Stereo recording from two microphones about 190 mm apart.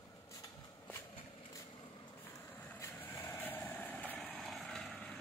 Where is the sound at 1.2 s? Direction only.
30° left (ahead or behind).